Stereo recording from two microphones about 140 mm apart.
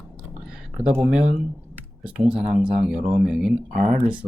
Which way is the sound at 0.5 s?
10° right (ahead or behind).